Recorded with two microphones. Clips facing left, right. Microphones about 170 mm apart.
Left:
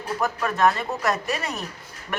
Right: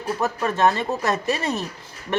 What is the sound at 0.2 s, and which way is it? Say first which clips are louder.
Speech: right 1 dB; 25° right (ahead or behind).